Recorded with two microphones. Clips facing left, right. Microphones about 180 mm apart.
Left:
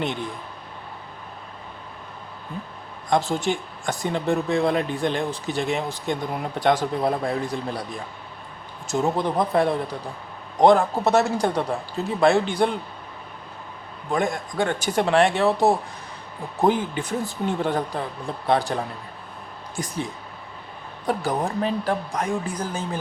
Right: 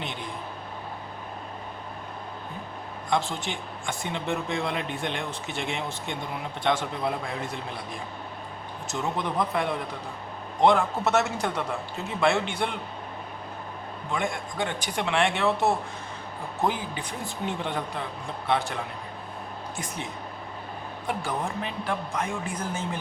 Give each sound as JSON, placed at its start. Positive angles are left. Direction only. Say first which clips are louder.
{"t": 3.1, "sound": "speech", "louder": "left 6 dB", "side_deg": 40}
{"t": 8.9, "sound": "speech", "louder": "left 7 dB", "side_deg": 40}
{"t": 14.1, "sound": "speech", "louder": "left 6 dB", "side_deg": 40}
{"t": 21.1, "sound": "speech", "louder": "left 6 dB", "side_deg": 40}